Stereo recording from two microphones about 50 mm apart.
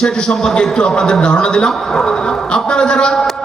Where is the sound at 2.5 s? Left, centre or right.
Centre.